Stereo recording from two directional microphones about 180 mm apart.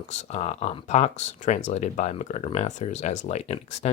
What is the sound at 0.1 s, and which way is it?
Speech, 40° left (ahead or behind).